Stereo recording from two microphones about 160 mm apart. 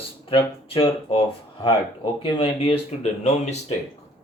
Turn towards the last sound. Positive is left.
turn(degrees=40)  # may be behind; listen again after turning